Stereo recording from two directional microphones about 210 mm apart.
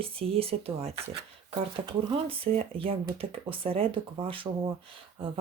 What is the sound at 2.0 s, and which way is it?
Speech, 25° right (ahead or behind).